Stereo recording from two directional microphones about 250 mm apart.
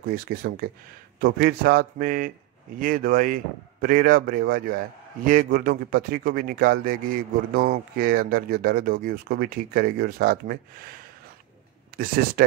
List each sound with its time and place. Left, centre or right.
0.1 s speech: right